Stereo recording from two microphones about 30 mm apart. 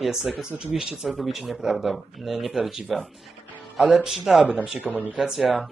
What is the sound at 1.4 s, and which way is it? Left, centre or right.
Speech, centre.